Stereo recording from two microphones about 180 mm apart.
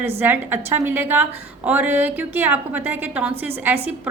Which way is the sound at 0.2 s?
10° right (ahead or behind).